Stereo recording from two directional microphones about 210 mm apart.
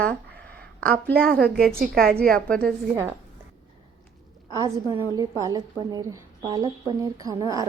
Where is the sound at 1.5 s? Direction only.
5° left (ahead or behind).